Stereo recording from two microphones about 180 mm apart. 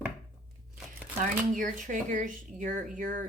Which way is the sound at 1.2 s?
45° right (ahead or behind).